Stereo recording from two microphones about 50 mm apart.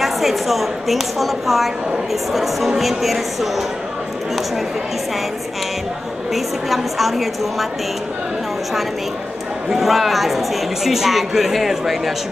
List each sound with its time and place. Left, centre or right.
0.0 s speech: centre
6.3 s speech: centre
9.7 s speech: centre